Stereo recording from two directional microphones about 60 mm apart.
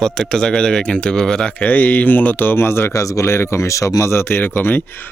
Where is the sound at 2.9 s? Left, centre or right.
Left.